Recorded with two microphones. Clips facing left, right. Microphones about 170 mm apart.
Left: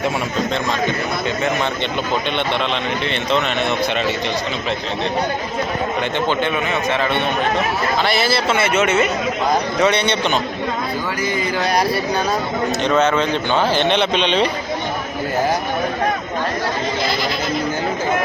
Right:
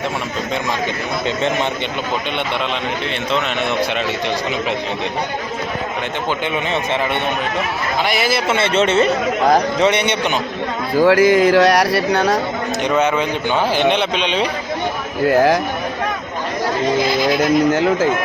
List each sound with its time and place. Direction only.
8.0 s speech: 15° right (ahead or behind); by 9.0 s 30° right (ahead or behind)
9.8 s speech: 20° right (ahead or behind)
11.0 s speech: 90° right
12.8 s speech: 15° right (ahead or behind)
15.3 s a man's voice: 90° right
17.7 s speech: 80° right